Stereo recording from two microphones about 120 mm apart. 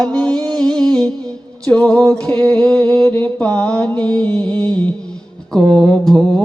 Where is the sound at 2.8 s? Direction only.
30° right (ahead or behind).